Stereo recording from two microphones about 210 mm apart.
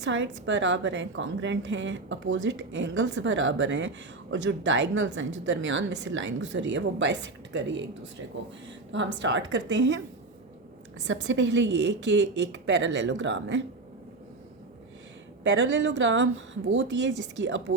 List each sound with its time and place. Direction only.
0.0 s a woman's voice: 60° right (ahead or behind)
8.9 s a woman's voice: 60° right (ahead or behind)
11.0 s a woman's voice: 60° right (ahead or behind)
15.4 s a woman's voice: 65° right (ahead or behind)